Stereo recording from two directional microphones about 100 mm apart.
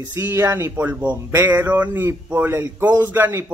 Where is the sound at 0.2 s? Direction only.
25° right (ahead or behind).